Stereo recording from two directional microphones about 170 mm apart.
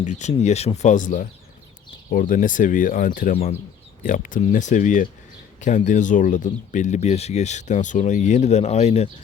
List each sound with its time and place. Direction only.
0.0 s speech: 45° left (ahead or behind)